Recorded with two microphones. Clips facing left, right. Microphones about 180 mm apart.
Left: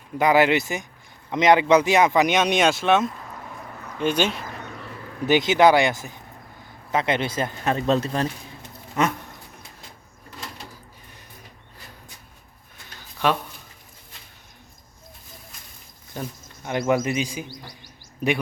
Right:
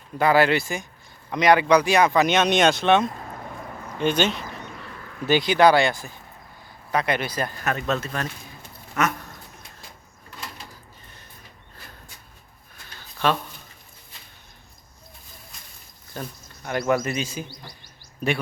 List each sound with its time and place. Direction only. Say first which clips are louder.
0.2 s speech: left 1 dB; 15° left (ahead or behind)
3.9 s a sound: even; 5° left (ahead or behind)
5.2 s speech: left 1 dB; 20° left (ahead or behind)
13.0 s a sound: left 1 dB; 15° left (ahead or behind)
16.1 s speech: left 2 dB; 15° left (ahead or behind)
17.5 s speech: left 3 dB; 45° left (ahead or behind)